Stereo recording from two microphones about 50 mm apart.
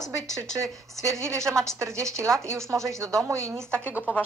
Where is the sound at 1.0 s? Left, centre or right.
Right.